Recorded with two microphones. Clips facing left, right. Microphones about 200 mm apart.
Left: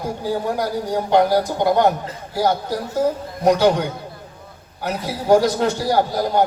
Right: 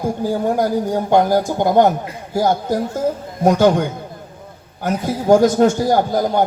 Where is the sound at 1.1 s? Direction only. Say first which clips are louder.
Right 1 dB; 50° right (ahead or behind).